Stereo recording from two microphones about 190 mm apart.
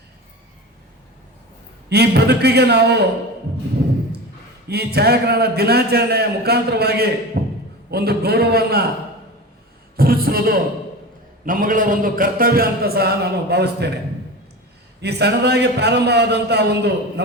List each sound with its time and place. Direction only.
1.9 s a man's voice: 60° right (ahead or behind)
4.7 s a man's voice: 55° right (ahead or behind)
7.3 s a sound: 55° right (ahead or behind)
7.9 s a man's voice: 55° right (ahead or behind)
10.0 s a sound: 50° right (ahead or behind)
11.4 s a man's voice: 45° right (ahead or behind)
15.0 s a man's voice: 60° right (ahead or behind)